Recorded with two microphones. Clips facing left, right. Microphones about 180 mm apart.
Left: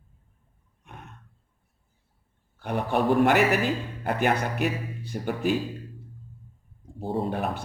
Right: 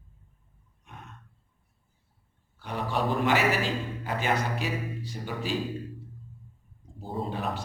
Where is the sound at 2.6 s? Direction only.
55° left (ahead or behind).